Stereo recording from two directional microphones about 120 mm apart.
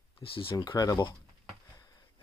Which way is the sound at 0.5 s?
35° left (ahead or behind).